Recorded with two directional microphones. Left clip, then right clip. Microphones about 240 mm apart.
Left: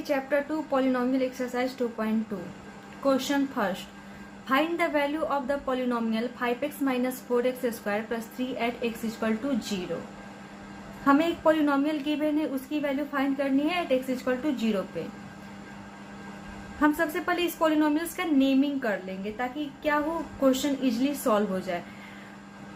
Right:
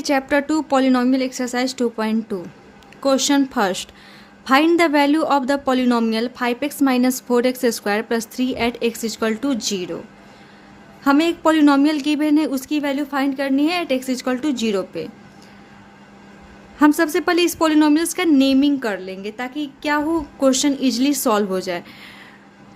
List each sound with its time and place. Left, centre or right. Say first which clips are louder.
0.1 s a woman's voice: right 8 dB; right
11.0 s a woman's voice: right 6 dB; right
16.8 s a woman's voice: right 9 dB; right